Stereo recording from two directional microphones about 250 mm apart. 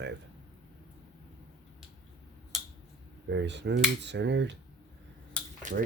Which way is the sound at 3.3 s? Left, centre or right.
Right.